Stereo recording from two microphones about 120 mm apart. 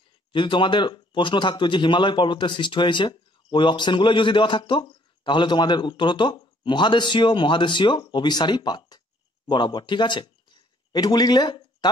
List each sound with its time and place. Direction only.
0.3 s a man's voice: 45° left (ahead or behind)